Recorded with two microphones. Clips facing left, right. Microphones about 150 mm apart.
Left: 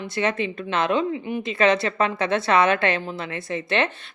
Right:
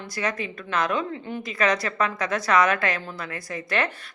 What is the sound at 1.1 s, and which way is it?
Speech, 15° left (ahead or behind).